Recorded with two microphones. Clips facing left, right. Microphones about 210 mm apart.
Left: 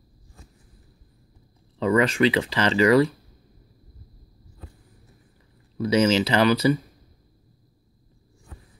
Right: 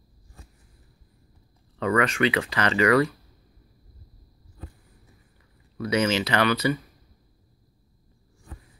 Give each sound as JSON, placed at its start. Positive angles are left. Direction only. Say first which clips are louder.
{"t": 1.8, "sound": "speech", "louder": "left 3 dB", "side_deg": 30}
{"t": 5.9, "sound": "speech", "louder": "left 4 dB", "side_deg": 35}